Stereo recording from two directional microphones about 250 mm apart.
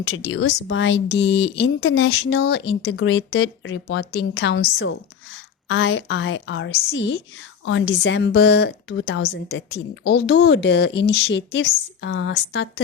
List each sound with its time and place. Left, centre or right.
0.3 s a woman's voice: left